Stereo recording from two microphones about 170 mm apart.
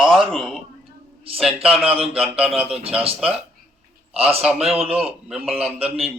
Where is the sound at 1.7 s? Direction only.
35° right (ahead or behind).